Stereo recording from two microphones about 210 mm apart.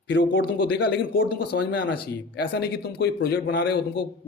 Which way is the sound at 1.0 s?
45° left (ahead or behind).